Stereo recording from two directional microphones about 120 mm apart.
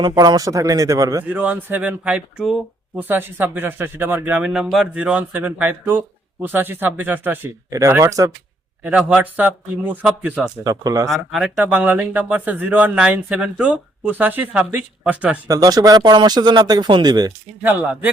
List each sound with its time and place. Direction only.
0.0 s speech: 35° right (ahead or behind)
1.3 s speech: 15° right (ahead or behind)
8.8 s speech: 10° right (ahead or behind)
10.6 s speech: 30° right (ahead or behind)
11.1 s speech: centre (ahead or behind)
11.4 s speech: 10° right (ahead or behind)
15.4 s speech: 30° right (ahead or behind)
17.6 s speech: 15° right (ahead or behind)